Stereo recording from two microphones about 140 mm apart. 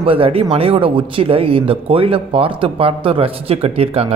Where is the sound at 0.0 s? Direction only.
40° right (ahead or behind).